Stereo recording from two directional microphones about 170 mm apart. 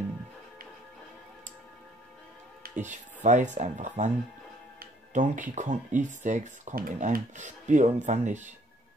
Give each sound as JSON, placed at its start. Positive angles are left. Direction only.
{"t": 2.6, "sound": "music", "side_deg": -45}
{"t": 3.3, "sound": "speech", "side_deg": -45}